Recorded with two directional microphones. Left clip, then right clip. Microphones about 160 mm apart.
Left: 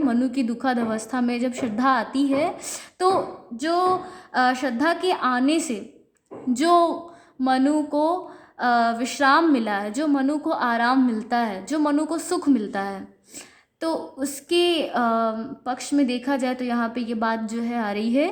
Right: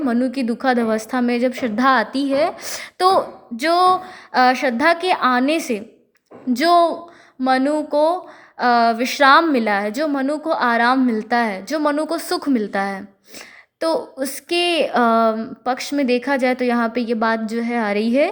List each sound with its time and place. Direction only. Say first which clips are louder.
0.0 s a woman's voice: right 3 dB; 15° right (ahead or behind)